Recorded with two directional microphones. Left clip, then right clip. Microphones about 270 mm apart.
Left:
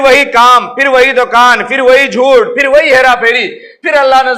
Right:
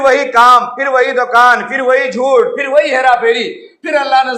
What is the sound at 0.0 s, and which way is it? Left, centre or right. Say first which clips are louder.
A man's voice: left 3 dB; left.